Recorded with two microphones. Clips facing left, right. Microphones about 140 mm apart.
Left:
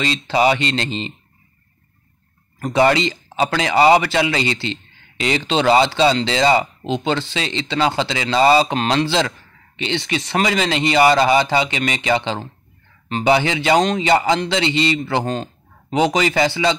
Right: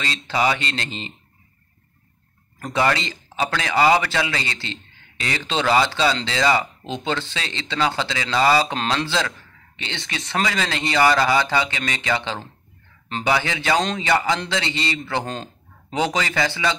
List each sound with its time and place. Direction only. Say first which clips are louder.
0.0 s speech: left 5 dB; 20° left (ahead or behind)
2.6 s speech: left 6 dB; 20° left (ahead or behind)
15.2 s speech: left 7 dB; 10° left (ahead or behind)
16.0 s speech: left 6 dB; 20° left (ahead or behind)